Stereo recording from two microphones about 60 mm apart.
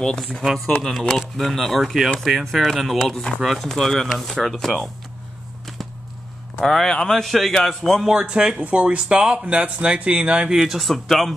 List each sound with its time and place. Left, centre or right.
0.0 s a man's voice: centre
2.1 s a man's voice: centre
6.6 s a man's voice: centre
8.1 s a man's voice: centre
10.5 s a man's voice: centre